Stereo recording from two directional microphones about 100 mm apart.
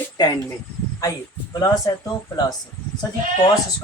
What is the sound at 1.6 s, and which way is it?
Speech, 35° left (ahead or behind).